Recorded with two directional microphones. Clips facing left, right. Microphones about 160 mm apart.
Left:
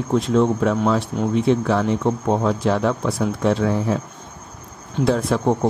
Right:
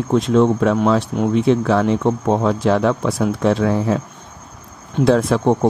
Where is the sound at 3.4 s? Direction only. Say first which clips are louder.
Right 2 dB; 80° right.